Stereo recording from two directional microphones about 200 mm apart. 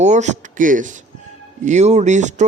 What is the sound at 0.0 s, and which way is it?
Speech, 35° right (ahead or behind).